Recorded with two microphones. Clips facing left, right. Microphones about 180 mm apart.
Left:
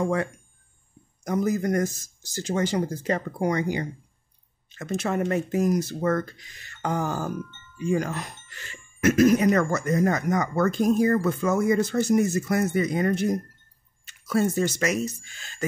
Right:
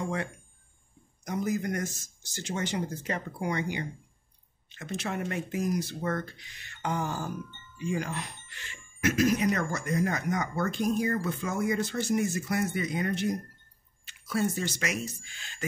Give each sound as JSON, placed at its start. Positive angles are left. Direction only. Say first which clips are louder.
{"t": 0.0, "sound": "speech", "louder": "left 8 dB", "side_deg": 40}